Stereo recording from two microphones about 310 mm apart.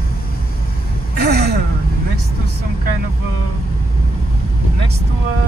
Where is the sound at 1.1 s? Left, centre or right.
Right.